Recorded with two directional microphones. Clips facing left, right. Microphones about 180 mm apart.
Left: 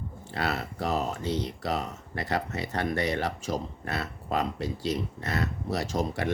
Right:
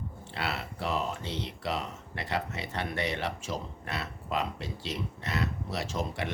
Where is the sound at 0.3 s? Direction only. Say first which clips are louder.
Left 4 dB; 45° left (ahead or behind).